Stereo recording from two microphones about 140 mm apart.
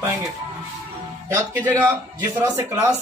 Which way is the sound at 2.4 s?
20° right (ahead or behind).